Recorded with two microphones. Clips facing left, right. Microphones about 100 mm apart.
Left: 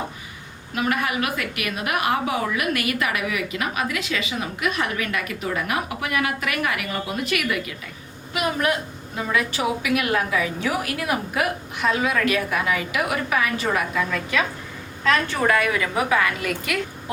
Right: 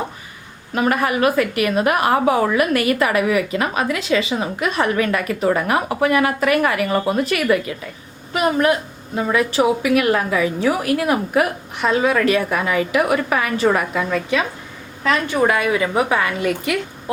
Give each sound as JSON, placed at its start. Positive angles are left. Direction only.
{"t": 0.8, "sound": "a woman's voice", "side_deg": -40}
{"t": 15.0, "sound": "a woman's voice", "side_deg": -15}